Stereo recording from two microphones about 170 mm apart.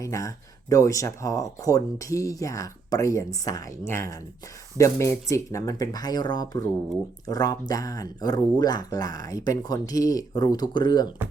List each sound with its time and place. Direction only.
0.0 s speech: 20° left (ahead or behind)